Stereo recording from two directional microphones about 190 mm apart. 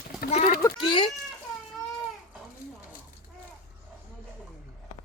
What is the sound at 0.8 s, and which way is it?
Chicken, 25° left (ahead or behind).